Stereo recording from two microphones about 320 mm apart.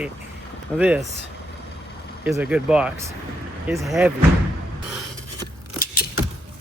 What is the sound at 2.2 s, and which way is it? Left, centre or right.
Speech, centre.